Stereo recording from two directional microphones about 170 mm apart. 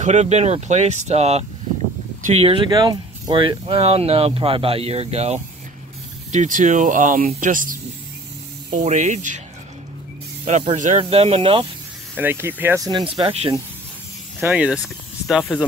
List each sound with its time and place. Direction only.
0.0 s speech: 40° right (ahead or behind)
10.4 s speech: 40° right (ahead or behind)
12.2 s speech: 15° right (ahead or behind); by 13.5 s 35° right (ahead or behind)
14.4 s speech: 10° right (ahead or behind)